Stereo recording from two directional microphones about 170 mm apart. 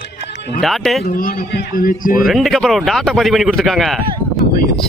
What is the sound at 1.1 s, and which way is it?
A man's voice, 60° left (ahead or behind).